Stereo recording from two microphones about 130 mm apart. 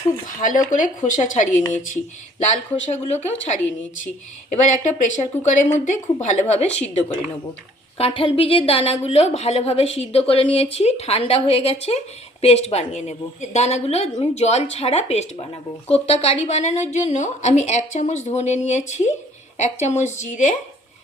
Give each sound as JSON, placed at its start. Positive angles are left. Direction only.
{"t": 0.3, "sound": "speech", "side_deg": 90}
{"t": 0.7, "sound": "speech", "side_deg": 75}
{"t": 2.4, "sound": "a woman's voice", "side_deg": 65}
{"t": 4.0, "sound": "a woman's voice", "side_deg": 70}
{"t": 7.9, "sound": "a woman's voice", "side_deg": 45}